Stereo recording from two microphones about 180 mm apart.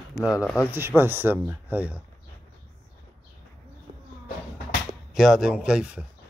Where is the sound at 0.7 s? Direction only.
10° right (ahead or behind).